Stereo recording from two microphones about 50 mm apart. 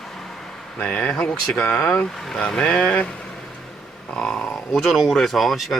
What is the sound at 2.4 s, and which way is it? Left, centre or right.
Speech, centre.